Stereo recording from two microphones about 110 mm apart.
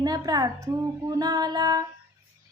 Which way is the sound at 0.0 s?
35° right (ahead or behind).